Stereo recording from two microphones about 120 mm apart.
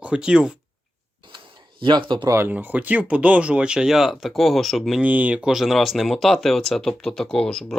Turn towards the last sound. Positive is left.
turn(degrees=5)  # may be behind; listen again after turning